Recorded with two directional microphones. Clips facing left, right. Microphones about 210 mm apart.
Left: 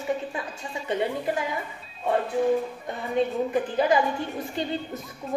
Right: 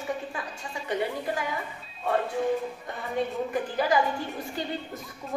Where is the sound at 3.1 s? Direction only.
20° left (ahead or behind).